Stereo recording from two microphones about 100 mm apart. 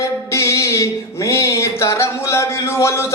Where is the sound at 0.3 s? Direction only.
30° left (ahead or behind).